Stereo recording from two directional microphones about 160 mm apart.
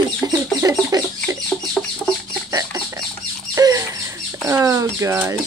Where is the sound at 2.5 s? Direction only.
20° right (ahead or behind).